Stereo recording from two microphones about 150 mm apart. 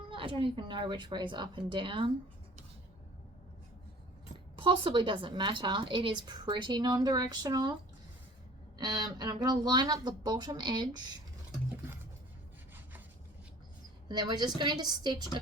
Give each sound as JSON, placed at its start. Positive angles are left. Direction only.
{"t": 0.1, "sound": "a woman's voice", "side_deg": -35}
{"t": 4.5, "sound": "a woman's voice", "side_deg": -35}
{"t": 8.8, "sound": "speech", "side_deg": -25}
{"t": 14.1, "sound": "speech", "side_deg": -30}